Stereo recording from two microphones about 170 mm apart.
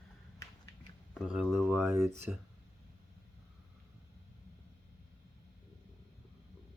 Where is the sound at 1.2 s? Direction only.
Centre (ahead or behind).